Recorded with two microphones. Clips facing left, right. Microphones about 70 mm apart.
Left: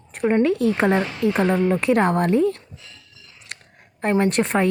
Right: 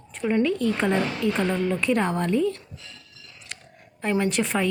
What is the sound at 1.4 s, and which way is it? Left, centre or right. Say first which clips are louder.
Speech: left 5 dB; left.